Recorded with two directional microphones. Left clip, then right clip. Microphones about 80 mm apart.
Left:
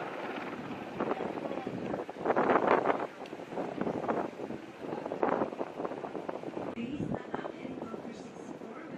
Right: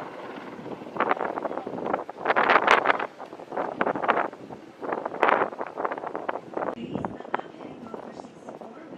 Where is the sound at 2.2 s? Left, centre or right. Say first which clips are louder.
Right 7 dB; right.